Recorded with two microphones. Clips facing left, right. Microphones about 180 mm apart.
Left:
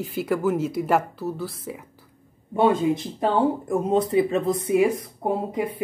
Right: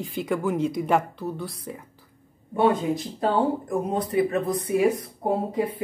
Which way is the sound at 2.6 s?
20° left (ahead or behind).